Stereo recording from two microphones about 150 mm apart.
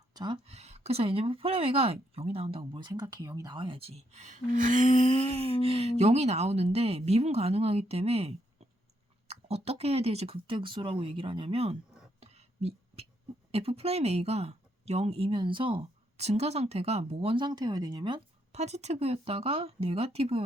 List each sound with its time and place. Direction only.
0.1 s a sound: 30° right (ahead or behind)
0.4 s speech: 45° right (ahead or behind); by 4.9 s 60° right (ahead or behind)
4.9 s speech: 45° right (ahead or behind)
12.2 s whispering: 45° right (ahead or behind)
13.5 s speech: 40° right (ahead or behind)
18.5 s speech: 45° right (ahead or behind)